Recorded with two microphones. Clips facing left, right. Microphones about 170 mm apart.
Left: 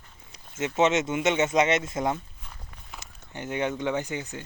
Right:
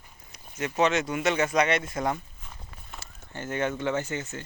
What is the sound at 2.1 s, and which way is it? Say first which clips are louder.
Walk: left 1 dB; centre (ahead or behind).